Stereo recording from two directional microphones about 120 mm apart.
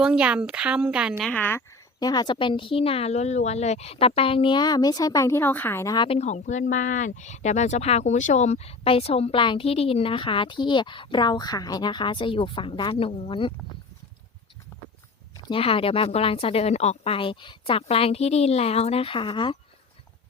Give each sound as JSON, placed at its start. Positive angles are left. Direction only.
{"t": 0.0, "sound": "speech", "side_deg": -10}
{"t": 1.3, "sound": "speech", "side_deg": 15}
{"t": 2.0, "sound": "speech", "side_deg": 35}
{"t": 6.1, "sound": "speech", "side_deg": 75}
{"t": 15.4, "sound": "speech", "side_deg": 50}